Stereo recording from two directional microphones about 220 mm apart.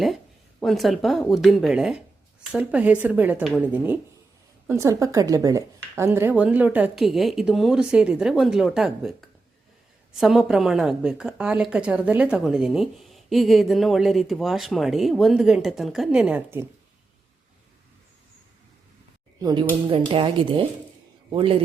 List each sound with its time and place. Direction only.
0.6 s a woman's voice: centre (ahead or behind)
19.4 s speech: 20° right (ahead or behind)